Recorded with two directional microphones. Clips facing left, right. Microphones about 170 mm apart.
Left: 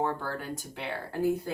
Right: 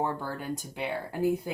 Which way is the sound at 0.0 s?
15° right (ahead or behind).